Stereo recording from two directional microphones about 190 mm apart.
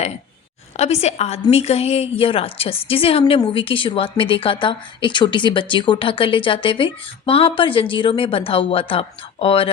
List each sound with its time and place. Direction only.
0.8 s a woman's voice: 35° left (ahead or behind)